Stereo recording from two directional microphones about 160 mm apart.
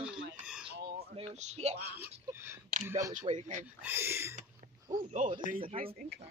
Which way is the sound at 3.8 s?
15° right (ahead or behind).